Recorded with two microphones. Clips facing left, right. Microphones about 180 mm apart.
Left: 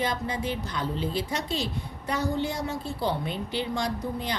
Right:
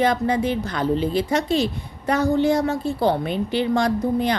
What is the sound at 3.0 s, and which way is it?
A woman's voice, 70° right (ahead or behind).